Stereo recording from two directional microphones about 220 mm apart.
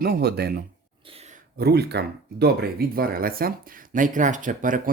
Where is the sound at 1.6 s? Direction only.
45° right (ahead or behind).